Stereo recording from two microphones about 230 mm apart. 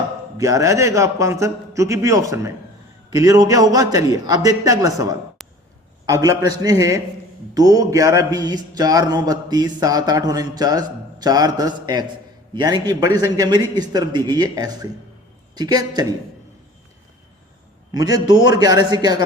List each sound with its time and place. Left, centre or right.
0.3 s a man's voice: centre
5.4 s a sound: centre
6.1 s a man's voice: centre
17.9 s a man's voice: centre